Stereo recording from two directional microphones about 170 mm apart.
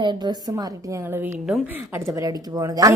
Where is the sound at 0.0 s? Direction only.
25° right (ahead or behind).